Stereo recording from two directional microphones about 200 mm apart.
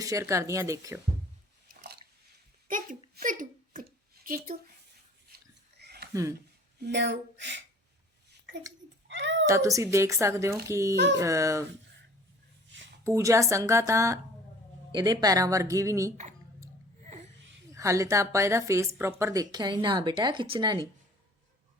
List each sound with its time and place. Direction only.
0.0 s a woman's voice: 15° right (ahead or behind)
1.6 s drip: 50° right (ahead or behind)
2.6 s a sound: 40° right (ahead or behind)
5.8 s a sound: 55° right (ahead or behind)
6.7 s speech: 60° right (ahead or behind)
9.0 s a sound: 65° right (ahead or behind)
9.5 s a woman's voice: 15° right (ahead or behind)
10.9 s speech: 60° right (ahead or behind)
11.2 s a woman's voice: 15° right (ahead or behind)
13.1 s a woman's voice: 15° right (ahead or behind)
17.7 s a woman's voice: 15° right (ahead or behind)